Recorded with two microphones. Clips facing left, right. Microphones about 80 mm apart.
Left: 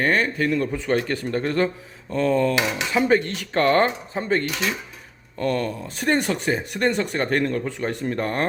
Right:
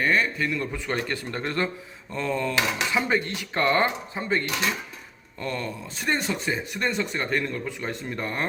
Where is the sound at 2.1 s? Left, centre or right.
Left.